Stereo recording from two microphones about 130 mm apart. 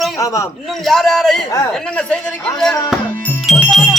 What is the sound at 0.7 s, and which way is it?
A man's voice, centre (ahead or behind).